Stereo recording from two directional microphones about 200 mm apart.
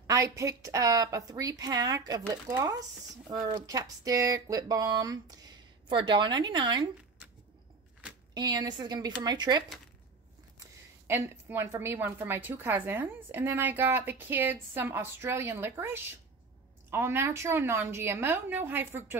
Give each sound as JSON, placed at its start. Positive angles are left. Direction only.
{"t": 0.0, "sound": "a woman's voice", "side_deg": -15}
{"t": 8.4, "sound": "speech", "side_deg": -20}
{"t": 10.6, "sound": "a woman's voice", "side_deg": -10}